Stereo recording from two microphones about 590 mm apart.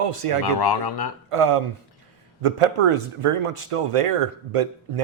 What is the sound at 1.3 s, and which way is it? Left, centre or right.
Speech, right.